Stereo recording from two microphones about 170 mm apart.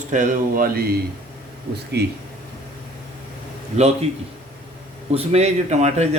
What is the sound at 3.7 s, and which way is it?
Mantra, 40° right (ahead or behind).